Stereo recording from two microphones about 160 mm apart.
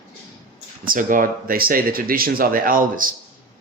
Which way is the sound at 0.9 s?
55° right (ahead or behind).